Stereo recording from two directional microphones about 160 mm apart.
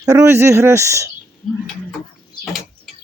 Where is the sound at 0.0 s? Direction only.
20° right (ahead or behind).